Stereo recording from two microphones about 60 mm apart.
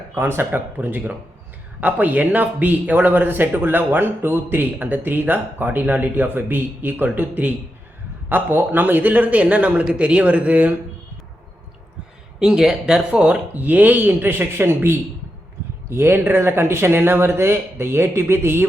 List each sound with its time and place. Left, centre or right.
0.1 s a man's voice: right
12.4 s speech: centre
13.1 s speech: right